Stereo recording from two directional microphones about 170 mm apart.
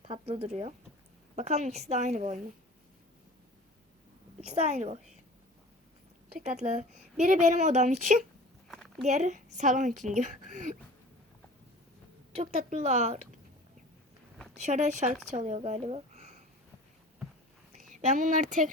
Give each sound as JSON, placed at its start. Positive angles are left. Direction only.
{"t": 0.0, "sound": "a woman's voice", "side_deg": -30}
{"t": 4.4, "sound": "a woman's voice", "side_deg": -40}
{"t": 6.4, "sound": "a woman's voice", "side_deg": -45}
{"t": 8.6, "sound": "a sound", "side_deg": 0}
{"t": 9.0, "sound": "a woman's voice", "side_deg": -45}
{"t": 12.3, "sound": "a woman's voice", "side_deg": -40}
{"t": 14.6, "sound": "a woman's voice", "side_deg": -45}
{"t": 17.9, "sound": "a woman's voice", "side_deg": -50}